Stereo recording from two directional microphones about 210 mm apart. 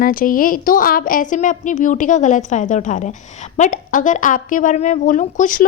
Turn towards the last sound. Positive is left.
turn(degrees=40)  # may be behind; listen again after turning